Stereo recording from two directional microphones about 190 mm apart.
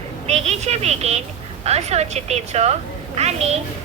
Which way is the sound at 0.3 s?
35° right (ahead or behind).